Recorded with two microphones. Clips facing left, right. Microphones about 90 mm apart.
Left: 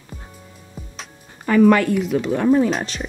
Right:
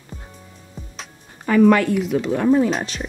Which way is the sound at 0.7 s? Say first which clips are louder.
Even; centre (ahead or behind).